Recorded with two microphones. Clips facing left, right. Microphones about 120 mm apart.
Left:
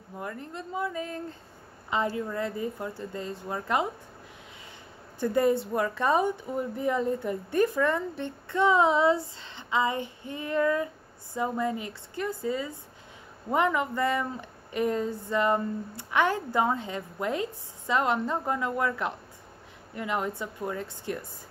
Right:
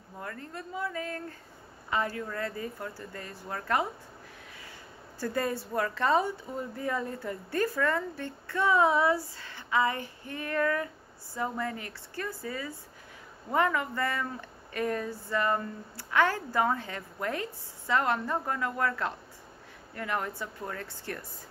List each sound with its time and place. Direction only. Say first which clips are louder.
0.2 s a woman's voice: left 3 dB; 15° left (ahead or behind)
5.2 s a woman's voice: left 7 dB; 20° left (ahead or behind)